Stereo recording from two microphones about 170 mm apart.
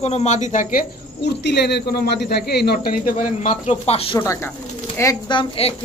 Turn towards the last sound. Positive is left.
turn(degrees=30)  # may be behind; listen again after turning